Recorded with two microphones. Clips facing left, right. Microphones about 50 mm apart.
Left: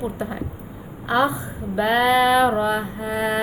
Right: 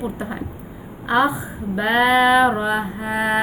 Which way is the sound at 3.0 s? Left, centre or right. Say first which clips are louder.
Right 2 dB; right.